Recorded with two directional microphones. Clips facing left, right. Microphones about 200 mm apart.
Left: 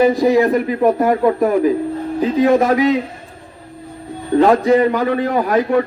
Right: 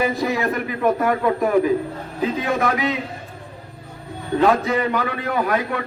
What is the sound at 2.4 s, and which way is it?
Speech, 35° left (ahead or behind).